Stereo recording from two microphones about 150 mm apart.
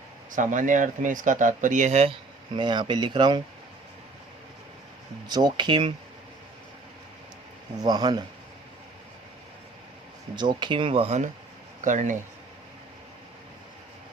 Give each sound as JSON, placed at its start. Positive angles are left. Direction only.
{"t": 0.3, "sound": "speech", "side_deg": -60}
{"t": 2.6, "sound": "speech", "side_deg": -30}
{"t": 5.3, "sound": "speech", "side_deg": -30}
{"t": 7.8, "sound": "speech", "side_deg": -25}
{"t": 10.3, "sound": "speech", "side_deg": -30}
{"t": 11.8, "sound": "speech", "side_deg": -55}